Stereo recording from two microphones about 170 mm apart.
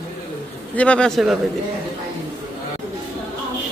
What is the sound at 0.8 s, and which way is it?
Speech, 5° left (ahead or behind).